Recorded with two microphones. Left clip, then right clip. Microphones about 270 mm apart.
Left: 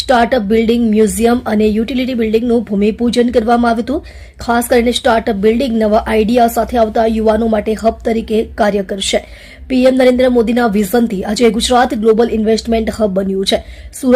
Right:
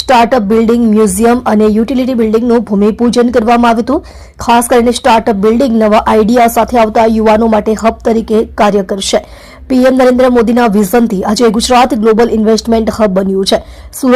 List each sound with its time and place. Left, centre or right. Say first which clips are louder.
0.1 s a woman's voice: right 4 dB; centre